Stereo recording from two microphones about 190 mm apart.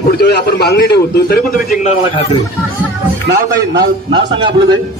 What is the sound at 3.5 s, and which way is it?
A man's voice, 20° right (ahead or behind).